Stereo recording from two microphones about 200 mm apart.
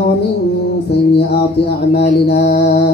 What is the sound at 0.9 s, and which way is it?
Music, 55° left (ahead or behind).